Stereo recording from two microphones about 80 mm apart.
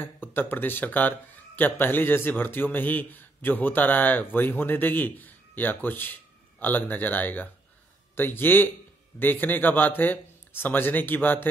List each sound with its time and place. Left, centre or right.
0.0 s speech: left